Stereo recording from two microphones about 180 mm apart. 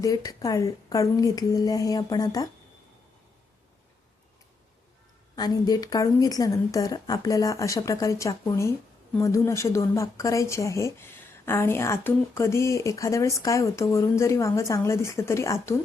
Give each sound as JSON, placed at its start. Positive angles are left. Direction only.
{"t": 0.0, "sound": "speech", "side_deg": 20}
{"t": 5.4, "sound": "speech", "side_deg": 20}